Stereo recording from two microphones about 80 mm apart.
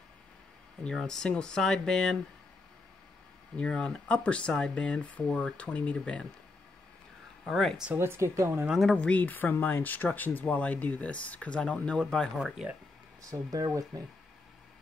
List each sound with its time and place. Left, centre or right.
0.8 s speech: centre
3.5 s speech: centre
7.4 s speech: centre
8.0 s speech: right
8.9 s speech: centre
12.4 s speech: centre
13.2 s speech: right